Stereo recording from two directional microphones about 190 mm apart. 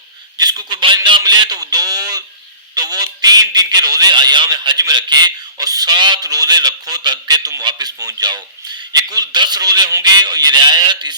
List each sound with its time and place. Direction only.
0.3 s a man's voice: 20° right (ahead or behind)